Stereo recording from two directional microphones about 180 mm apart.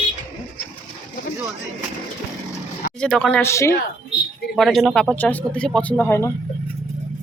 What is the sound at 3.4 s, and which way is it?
Speech, 15° left (ahead or behind).